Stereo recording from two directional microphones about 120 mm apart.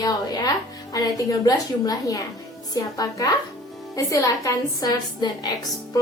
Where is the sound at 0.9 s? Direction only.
30° left (ahead or behind).